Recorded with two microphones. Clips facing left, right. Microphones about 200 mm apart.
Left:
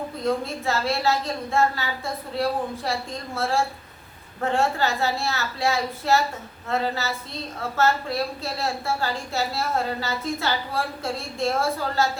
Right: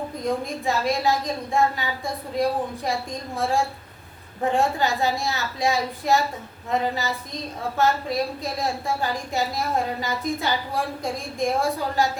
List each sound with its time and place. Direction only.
0.2 s a woman's voice: 15° right (ahead or behind)